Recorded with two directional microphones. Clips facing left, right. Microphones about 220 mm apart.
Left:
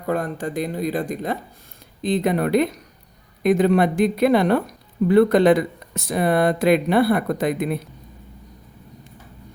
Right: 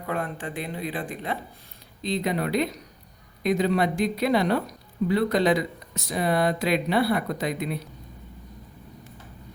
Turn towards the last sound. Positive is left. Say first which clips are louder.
# left 6 dB
turn(degrees=50)  # may be behind; listen again after turning